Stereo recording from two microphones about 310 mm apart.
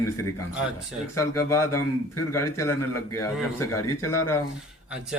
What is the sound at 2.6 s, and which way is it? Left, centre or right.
Mantra, centre.